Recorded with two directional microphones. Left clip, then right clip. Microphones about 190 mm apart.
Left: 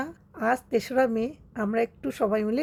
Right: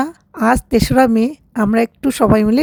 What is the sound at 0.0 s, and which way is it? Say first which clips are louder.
A woman's voice: right 11 dB; 50° right (ahead or behind).